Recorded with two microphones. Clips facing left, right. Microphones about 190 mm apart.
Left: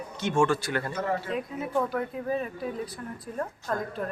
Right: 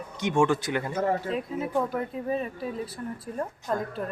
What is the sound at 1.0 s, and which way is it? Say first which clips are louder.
Speech: right 5 dB; 35° right (ahead or behind).